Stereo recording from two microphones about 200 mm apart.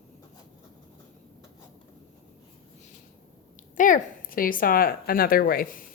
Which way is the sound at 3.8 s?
40° left (ahead or behind).